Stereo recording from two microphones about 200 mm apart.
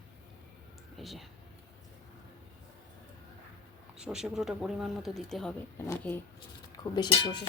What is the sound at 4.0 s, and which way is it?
Speech, 5° right (ahead or behind).